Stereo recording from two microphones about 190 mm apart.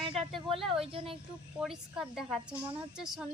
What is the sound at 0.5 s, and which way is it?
Speech, centre (ahead or behind).